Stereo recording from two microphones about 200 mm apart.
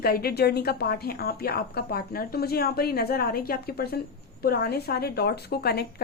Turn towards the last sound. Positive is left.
turn(degrees=50)  # may be behind; listen again after turning